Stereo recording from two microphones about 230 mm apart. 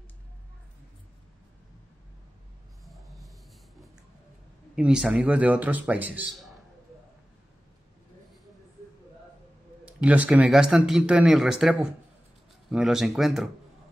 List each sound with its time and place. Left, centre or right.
2.8 s a sound: centre
4.7 s a man's voice: centre
9.8 s speech: centre